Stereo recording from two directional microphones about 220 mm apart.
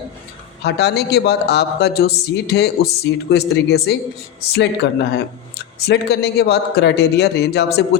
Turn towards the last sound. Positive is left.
turn(degrees=50)  # may be behind; listen again after turning